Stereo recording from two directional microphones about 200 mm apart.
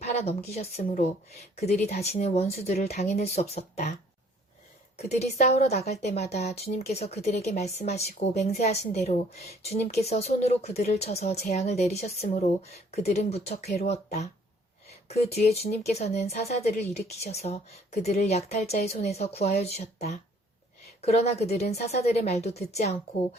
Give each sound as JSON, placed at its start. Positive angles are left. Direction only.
{"t": 0.0, "sound": "speech", "side_deg": 35}
{"t": 4.9, "sound": "speech", "side_deg": 30}